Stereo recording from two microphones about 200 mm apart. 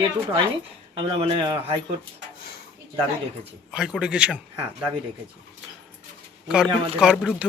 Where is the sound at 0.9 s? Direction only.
25° right (ahead or behind).